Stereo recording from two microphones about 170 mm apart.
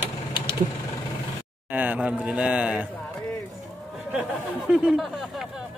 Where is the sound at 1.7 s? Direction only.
10° right (ahead or behind).